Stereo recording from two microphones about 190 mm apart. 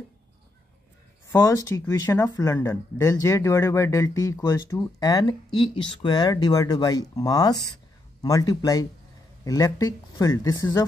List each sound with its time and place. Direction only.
1.3 s speech: 15° left (ahead or behind)